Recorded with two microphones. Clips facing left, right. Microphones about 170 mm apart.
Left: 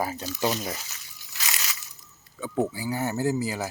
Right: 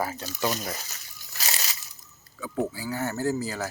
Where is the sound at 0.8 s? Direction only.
40° right (ahead or behind).